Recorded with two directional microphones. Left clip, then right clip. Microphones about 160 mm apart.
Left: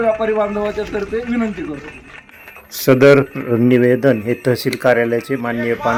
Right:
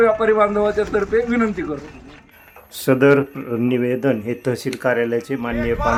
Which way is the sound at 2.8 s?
10° left (ahead or behind).